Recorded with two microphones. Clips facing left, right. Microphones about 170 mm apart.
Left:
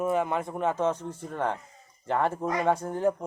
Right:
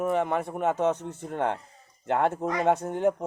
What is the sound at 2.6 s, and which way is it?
Speech, 25° right (ahead or behind).